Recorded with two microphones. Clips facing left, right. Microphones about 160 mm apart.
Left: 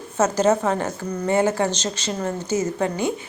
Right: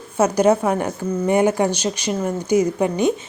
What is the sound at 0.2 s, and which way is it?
A woman's voice, 10° right (ahead or behind).